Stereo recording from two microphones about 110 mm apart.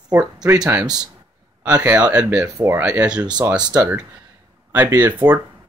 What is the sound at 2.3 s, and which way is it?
Speech, 30° right (ahead or behind).